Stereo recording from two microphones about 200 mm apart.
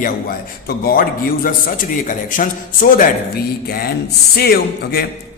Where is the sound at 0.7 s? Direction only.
50° left (ahead or behind).